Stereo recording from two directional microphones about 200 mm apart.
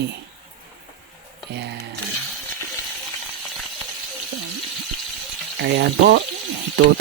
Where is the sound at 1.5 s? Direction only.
55° right (ahead or behind).